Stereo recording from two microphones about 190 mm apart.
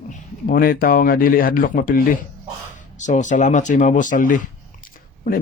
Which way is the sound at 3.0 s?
40° left (ahead or behind).